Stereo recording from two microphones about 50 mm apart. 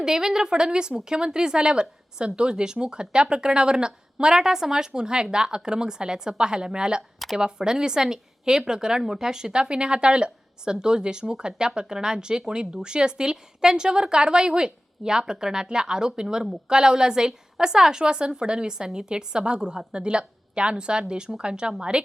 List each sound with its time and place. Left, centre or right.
0.0 s a woman's voice: centre